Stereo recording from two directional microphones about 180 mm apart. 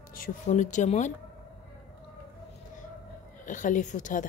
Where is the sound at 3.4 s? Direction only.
45° left (ahead or behind).